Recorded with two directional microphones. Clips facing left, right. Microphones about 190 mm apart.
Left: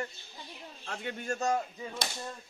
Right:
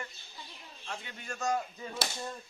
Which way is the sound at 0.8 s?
55° left (ahead or behind).